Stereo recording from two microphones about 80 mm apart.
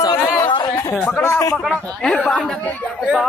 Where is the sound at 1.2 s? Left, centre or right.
Left.